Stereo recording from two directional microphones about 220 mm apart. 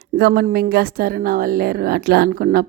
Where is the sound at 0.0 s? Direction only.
45° right (ahead or behind).